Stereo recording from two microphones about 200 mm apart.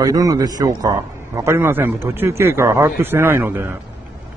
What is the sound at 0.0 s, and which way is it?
A man's voice, 20° right (ahead or behind).